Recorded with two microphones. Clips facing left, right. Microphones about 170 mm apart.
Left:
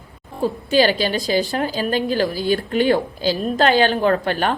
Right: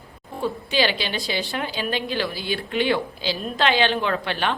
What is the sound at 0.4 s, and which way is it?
A woman's voice, 45° left (ahead or behind).